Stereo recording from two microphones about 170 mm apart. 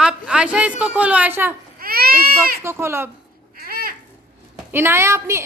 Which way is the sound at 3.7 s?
60° right (ahead or behind).